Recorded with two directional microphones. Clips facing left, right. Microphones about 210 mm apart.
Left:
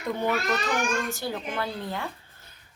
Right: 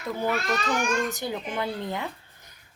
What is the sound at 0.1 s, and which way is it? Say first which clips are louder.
A child's voice: left 1 dB; 5° right (ahead or behind).